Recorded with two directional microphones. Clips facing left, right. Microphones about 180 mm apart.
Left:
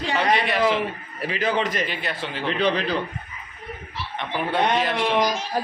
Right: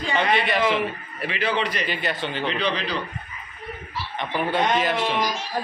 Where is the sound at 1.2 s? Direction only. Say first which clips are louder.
Left 1 dB; 40° left (ahead or behind).